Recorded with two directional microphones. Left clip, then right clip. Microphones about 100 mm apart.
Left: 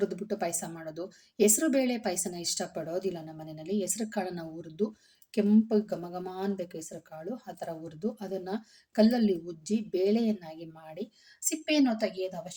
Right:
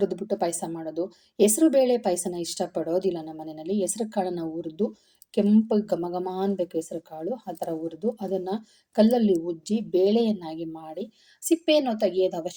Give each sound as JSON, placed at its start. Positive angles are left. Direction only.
{"t": 0.0, "sound": "a woman's voice", "side_deg": -10}
{"t": 11.4, "sound": "a woman's voice", "side_deg": -35}